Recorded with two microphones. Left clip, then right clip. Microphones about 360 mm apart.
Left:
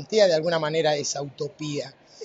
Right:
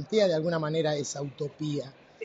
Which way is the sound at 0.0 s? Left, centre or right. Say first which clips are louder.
Left 5 dB; left.